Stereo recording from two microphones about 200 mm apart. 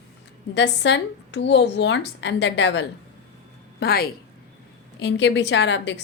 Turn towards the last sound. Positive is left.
turn(degrees=60)  # may be behind; listen again after turning